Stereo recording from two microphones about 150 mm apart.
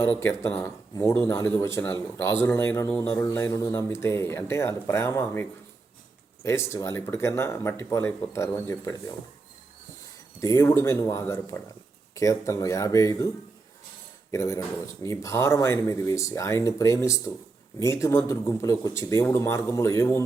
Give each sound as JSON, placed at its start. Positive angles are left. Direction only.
{"t": 0.2, "sound": "a man's voice", "side_deg": 15}
{"t": 10.4, "sound": "speech", "side_deg": 15}